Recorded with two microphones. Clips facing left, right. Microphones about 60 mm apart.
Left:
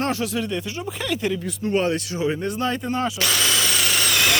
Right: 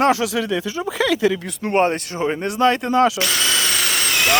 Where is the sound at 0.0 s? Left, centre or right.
Right.